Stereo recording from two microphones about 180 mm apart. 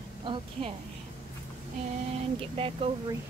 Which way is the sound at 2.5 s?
30° right (ahead or behind).